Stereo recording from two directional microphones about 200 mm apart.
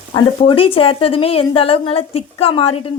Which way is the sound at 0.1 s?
25° left (ahead or behind).